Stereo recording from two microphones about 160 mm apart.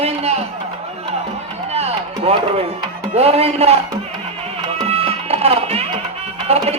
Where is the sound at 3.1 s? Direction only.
40° right (ahead or behind).